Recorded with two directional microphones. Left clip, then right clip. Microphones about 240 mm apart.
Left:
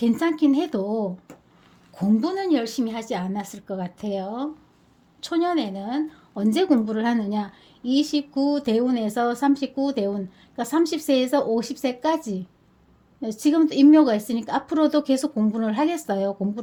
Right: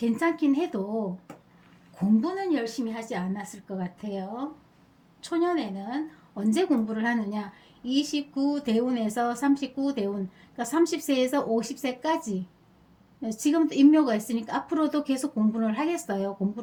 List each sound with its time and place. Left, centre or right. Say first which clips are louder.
0.0 s a woman's voice: left 4 dB; left
13.2 s a woman's voice: left 5 dB; left